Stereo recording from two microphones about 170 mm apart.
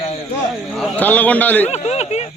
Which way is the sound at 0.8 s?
10° left (ahead or behind).